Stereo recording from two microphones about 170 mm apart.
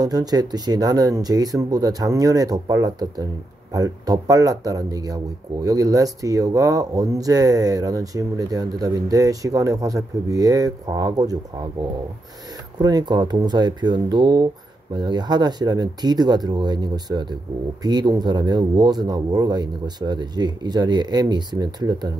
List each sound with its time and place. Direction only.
0.0 s speech: 20° right (ahead or behind)
12.7 s speech: 25° right (ahead or behind)